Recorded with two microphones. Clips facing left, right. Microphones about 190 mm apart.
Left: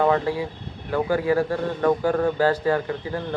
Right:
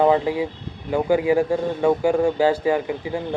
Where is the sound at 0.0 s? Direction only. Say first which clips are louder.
Right 3 dB; 15° right (ahead or behind).